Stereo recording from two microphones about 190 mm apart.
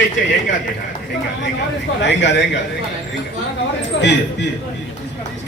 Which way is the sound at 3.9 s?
70° left (ahead or behind).